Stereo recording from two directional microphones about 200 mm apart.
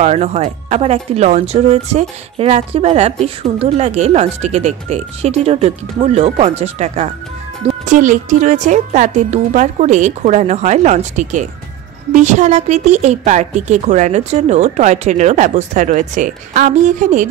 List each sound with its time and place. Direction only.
0.0 s speech: 35° right (ahead or behind)